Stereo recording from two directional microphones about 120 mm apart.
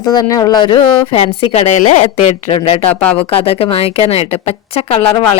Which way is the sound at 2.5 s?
50° left (ahead or behind).